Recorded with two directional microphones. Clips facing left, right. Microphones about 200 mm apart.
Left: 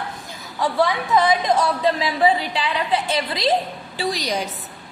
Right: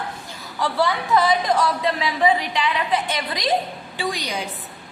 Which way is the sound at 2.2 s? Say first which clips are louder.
Left 1 dB; 30° left (ahead or behind).